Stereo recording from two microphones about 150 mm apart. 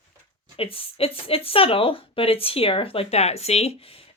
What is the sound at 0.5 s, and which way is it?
Speech, 40° left (ahead or behind).